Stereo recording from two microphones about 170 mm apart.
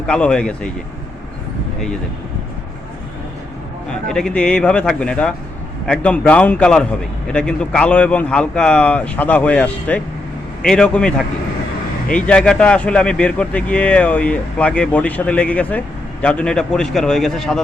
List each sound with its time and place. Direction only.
0.1 s a man's voice: 5° left (ahead or behind)
4.1 s a man's voice: 5° left (ahead or behind)